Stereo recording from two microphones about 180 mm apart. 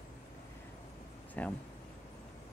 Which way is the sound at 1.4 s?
10° left (ahead or behind).